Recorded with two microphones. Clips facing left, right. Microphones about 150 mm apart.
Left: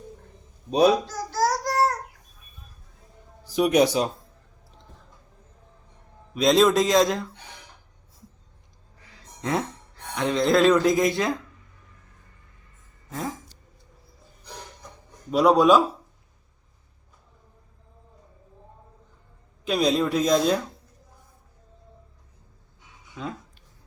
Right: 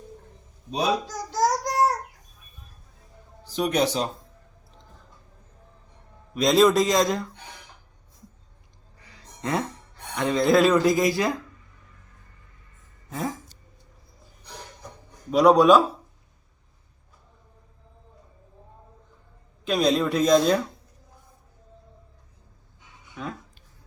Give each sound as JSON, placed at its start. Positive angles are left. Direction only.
{"t": 1.0, "sound": "child singing", "side_deg": -20}
{"t": 3.4, "sound": "a man's voice", "side_deg": 10}
{"t": 6.3, "sound": "a man's voice", "side_deg": 0}
{"t": 9.0, "sound": "speech", "side_deg": 0}
{"t": 13.1, "sound": "a sound", "side_deg": -5}
{"t": 15.3, "sound": "a man's voice", "side_deg": 5}
{"t": 19.6, "sound": "a man's voice", "side_deg": 5}